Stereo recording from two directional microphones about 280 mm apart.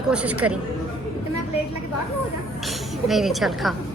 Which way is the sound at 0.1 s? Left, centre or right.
Centre.